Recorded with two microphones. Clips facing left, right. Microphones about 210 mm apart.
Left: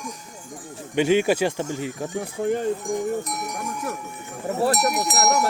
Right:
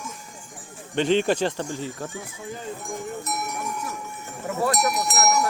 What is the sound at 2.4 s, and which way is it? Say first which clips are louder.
Speech: left 15 dB; 65° left (ahead or behind).